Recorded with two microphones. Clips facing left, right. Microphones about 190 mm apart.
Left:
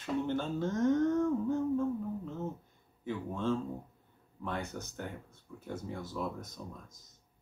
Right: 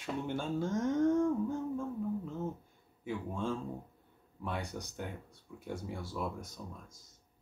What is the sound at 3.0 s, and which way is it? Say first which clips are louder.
Speech: left 2 dB; 10° right (ahead or behind).